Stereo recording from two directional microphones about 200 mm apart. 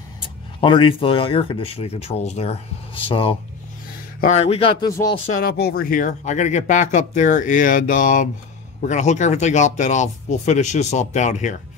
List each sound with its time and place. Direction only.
0.6 s speech: 25° left (ahead or behind)
5.3 s speech: 50° left (ahead or behind)